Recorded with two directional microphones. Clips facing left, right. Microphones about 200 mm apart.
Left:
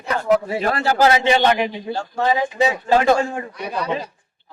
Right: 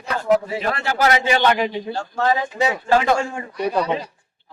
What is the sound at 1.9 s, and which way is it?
Speech, 15° left (ahead or behind).